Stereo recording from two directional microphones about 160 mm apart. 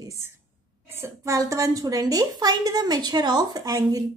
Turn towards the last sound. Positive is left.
turn(degrees=-20)  # may be behind; listen again after turning